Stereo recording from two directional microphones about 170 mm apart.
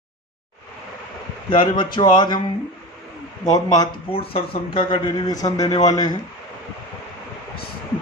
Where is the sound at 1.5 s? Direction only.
30° left (ahead or behind).